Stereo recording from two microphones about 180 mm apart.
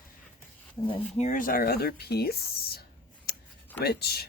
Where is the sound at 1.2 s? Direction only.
45° left (ahead or behind); by 2.3 s 60° left (ahead or behind).